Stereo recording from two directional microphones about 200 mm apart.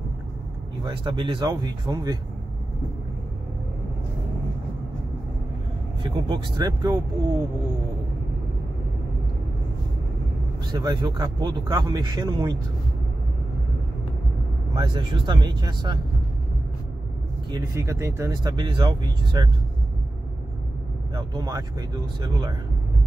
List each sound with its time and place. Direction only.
0.8 s speech: 25° right (ahead or behind)
6.0 s speech: 25° right (ahead or behind)
10.7 s speech: 20° right (ahead or behind)
14.8 s speech: 25° right (ahead or behind)
17.5 s speech: 15° right (ahead or behind)
21.1 s speech: 20° right (ahead or behind)